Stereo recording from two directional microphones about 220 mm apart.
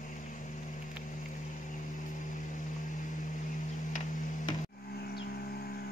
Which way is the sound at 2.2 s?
35° left (ahead or behind).